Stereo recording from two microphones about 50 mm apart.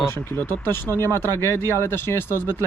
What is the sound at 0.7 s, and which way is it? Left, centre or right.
Speech, left.